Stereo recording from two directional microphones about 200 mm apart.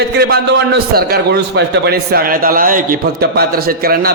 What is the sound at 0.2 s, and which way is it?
A man's voice, 50° right (ahead or behind).